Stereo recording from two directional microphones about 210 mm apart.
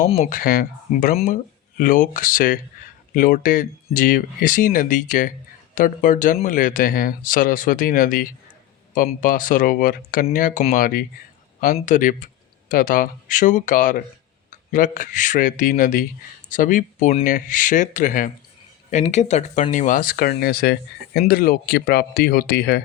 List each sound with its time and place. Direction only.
0.1 s speech: 35° left (ahead or behind)